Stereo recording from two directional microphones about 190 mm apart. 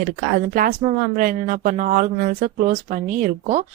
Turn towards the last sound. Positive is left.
turn(degrees=-45)  # may be behind; listen again after turning